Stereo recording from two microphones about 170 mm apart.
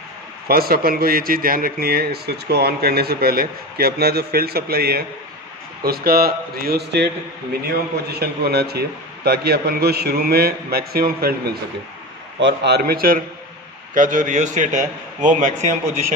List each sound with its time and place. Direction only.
0.5 s a man's voice: 60° right (ahead or behind)
12.4 s a man's voice: 85° right; by 13.2 s 60° right (ahead or behind)
13.9 s a man's voice: 50° right (ahead or behind)